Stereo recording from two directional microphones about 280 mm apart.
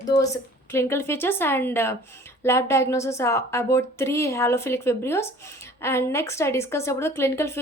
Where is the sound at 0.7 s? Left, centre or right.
Centre.